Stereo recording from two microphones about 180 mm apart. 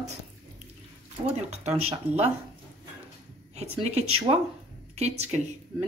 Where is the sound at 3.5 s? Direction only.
35° right (ahead or behind).